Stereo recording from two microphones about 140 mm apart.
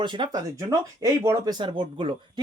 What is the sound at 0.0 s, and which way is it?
Speech, 35° right (ahead or behind).